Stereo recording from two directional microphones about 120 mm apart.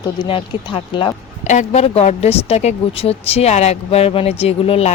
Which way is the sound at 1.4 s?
80° left.